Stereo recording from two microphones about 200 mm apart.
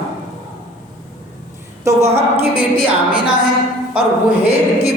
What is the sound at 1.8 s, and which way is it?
Speech, 15° right (ahead or behind).